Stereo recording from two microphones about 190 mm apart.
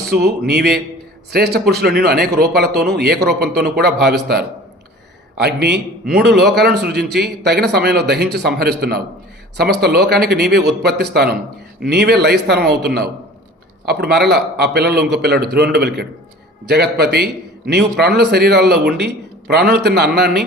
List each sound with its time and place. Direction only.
0.1 s a man's voice: 55° right (ahead or behind)